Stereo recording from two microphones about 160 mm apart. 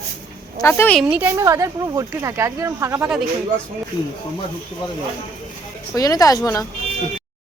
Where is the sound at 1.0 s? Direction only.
10° right (ahead or behind).